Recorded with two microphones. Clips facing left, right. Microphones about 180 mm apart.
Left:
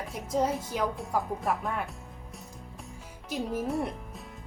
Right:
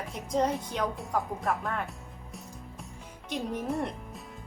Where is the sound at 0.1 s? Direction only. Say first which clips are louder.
Even; 5° left (ahead or behind).